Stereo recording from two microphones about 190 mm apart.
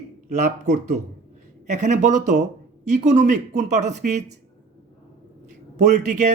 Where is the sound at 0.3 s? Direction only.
40° right (ahead or behind).